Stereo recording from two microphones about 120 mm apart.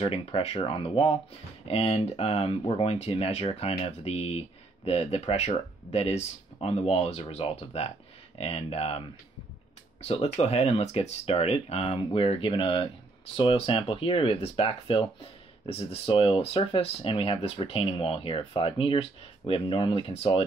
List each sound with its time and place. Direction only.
0.0 s speech: 50° left (ahead or behind)
10.0 s speech: 60° left (ahead or behind)